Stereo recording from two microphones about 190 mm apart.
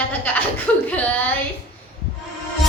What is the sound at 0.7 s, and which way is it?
Speech, 10° left (ahead or behind).